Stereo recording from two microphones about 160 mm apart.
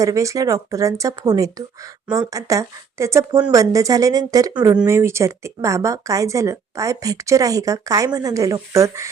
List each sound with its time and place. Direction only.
0.0 s speech: 20° right (ahead or behind)